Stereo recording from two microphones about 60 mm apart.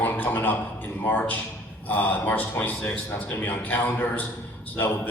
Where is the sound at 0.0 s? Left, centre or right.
Left.